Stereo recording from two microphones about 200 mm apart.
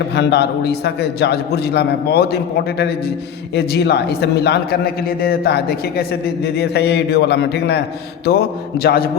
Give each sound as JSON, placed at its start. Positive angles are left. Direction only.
{"t": 0.2, "sound": "a man's voice", "side_deg": 55}